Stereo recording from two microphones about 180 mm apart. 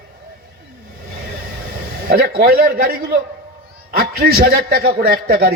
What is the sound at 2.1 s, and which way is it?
A man's voice, 55° right (ahead or behind).